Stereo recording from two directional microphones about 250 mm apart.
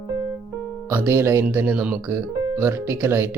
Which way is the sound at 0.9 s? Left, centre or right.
Centre.